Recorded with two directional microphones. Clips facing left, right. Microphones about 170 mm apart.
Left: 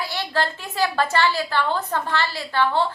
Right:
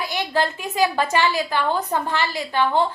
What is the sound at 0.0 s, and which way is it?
A woman's voice, 20° right (ahead or behind).